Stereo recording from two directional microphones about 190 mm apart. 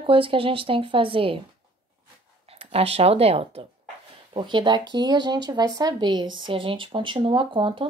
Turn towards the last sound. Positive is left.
turn(degrees=-25)  # may be behind; listen again after turning